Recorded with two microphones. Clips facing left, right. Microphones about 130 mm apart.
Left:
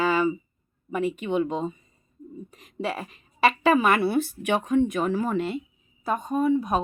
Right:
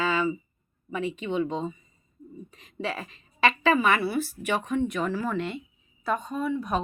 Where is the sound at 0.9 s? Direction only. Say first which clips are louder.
Left 4 dB; 50° left (ahead or behind).